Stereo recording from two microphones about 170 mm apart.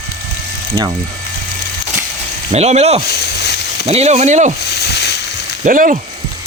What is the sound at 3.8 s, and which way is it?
Speech, 40° right (ahead or behind).